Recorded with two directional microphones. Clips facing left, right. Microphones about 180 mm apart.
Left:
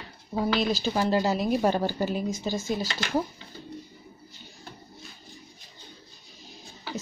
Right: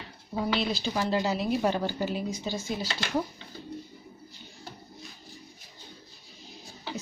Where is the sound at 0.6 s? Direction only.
45° left (ahead or behind).